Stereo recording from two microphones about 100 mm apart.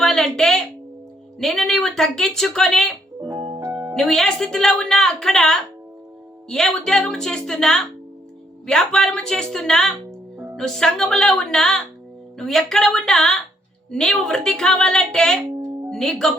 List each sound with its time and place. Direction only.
0.0 s a woman's voice: 5° left (ahead or behind)
3.3 s music: 45° right (ahead or behind)
3.6 s music: 25° right (ahead or behind)
3.9 s a woman's voice: 5° left (ahead or behind)